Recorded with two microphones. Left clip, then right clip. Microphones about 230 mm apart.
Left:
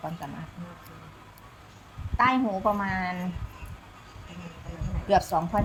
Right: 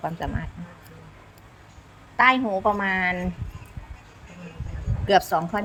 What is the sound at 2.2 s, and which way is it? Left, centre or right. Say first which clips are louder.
Speech: right 5 dB; centre.